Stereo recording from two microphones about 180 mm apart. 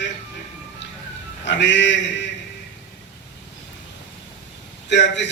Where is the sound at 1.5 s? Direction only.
85° left.